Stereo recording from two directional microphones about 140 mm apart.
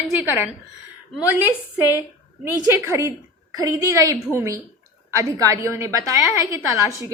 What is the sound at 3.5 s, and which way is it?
A woman's voice, 25° right (ahead or behind).